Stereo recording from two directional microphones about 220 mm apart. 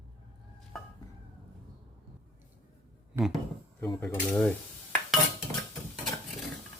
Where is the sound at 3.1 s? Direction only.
Centre (ahead or behind).